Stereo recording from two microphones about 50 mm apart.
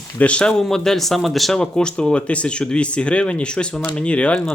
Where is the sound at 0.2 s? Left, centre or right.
Left; by 1.5 s centre.